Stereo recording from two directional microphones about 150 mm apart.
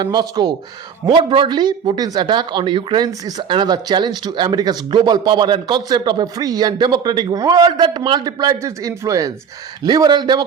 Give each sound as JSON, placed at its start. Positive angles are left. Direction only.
{"t": 0.0, "sound": "speech", "side_deg": -30}